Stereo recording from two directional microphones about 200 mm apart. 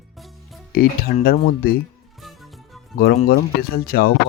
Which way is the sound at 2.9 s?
50° left (ahead or behind).